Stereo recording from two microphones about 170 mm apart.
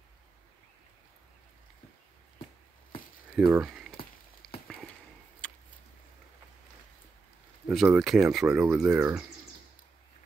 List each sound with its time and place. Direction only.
3.3 s speech: 5° right (ahead or behind)
4.4 s a sound: 5° left (ahead or behind)
7.6 s speech: 5° right (ahead or behind)
8.5 s speech: 15° right (ahead or behind)